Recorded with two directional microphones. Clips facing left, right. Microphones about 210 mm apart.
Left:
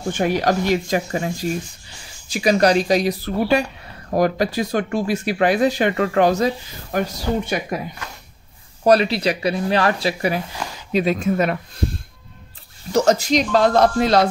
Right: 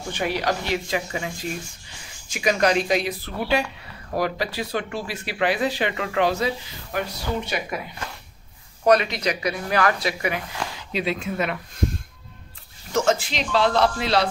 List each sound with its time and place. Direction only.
0.1 s speech: 45° left (ahead or behind)
8.8 s speech: 35° left (ahead or behind)
10.9 s speech: 45° left (ahead or behind)
12.9 s speech: 40° left (ahead or behind)